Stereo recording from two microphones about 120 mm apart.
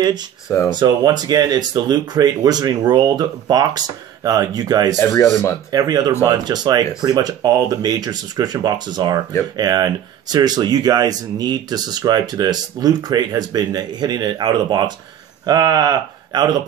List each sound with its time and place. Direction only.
0.7 s speech: 35° right (ahead or behind)
4.9 s speech: 25° left (ahead or behind)
5.7 s speech: 30° right (ahead or behind)